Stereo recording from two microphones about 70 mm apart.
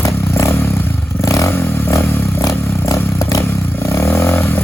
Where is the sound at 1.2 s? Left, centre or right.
Left.